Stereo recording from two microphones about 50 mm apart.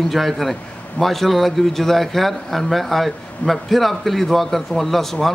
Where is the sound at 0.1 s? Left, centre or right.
Centre.